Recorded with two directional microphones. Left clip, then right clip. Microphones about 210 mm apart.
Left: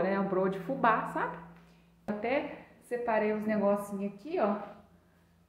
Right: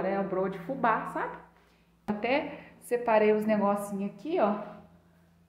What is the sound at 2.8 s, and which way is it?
A woman's voice, 35° right (ahead or behind).